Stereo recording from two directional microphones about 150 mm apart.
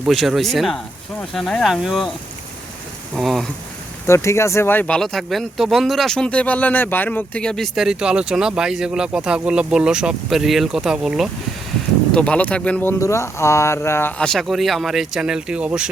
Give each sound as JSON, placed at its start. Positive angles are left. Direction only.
{"t": 0.0, "sound": "speech", "side_deg": 0}
{"t": 3.2, "sound": "speech", "side_deg": 0}
{"t": 4.0, "sound": "speech", "side_deg": 20}
{"t": 12.1, "sound": "speech", "side_deg": 10}
{"t": 14.2, "sound": "speech", "side_deg": 5}